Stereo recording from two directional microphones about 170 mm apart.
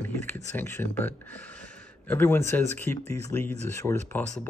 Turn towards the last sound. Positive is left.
turn(degrees=15)  # may be behind; listen again after turning